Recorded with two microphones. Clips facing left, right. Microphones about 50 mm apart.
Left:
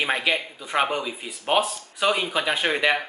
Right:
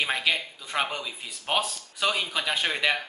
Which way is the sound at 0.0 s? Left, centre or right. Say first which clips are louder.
Left 3 dB; centre.